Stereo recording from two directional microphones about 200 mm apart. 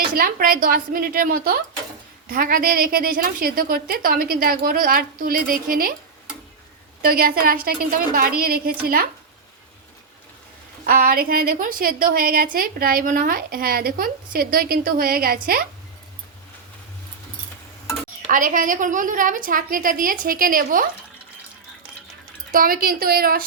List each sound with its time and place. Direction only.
0.2 s a woman's voice: 45° right (ahead or behind)
7.0 s a woman's voice: 45° right (ahead or behind)
10.8 s a woman's voice: 45° right (ahead or behind)
18.3 s a woman's voice: 40° right (ahead or behind)
22.5 s a woman's voice: 45° right (ahead or behind)